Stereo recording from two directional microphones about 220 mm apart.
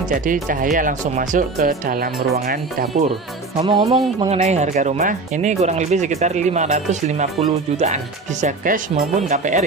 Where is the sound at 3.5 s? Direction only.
25° right (ahead or behind).